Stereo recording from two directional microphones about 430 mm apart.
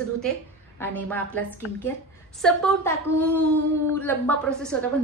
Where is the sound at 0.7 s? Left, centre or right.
Centre.